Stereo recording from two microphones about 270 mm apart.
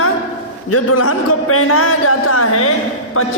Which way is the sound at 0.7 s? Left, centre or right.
Left.